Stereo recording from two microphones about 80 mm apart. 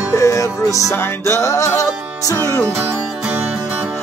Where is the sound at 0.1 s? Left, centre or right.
Left.